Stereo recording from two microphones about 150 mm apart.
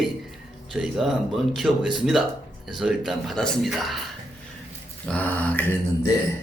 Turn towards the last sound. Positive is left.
turn(degrees=15)  # may be behind; listen again after turning